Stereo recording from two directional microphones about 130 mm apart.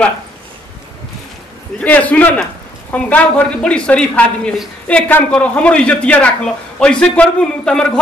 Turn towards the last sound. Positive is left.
turn(degrees=5)  # may be behind; listen again after turning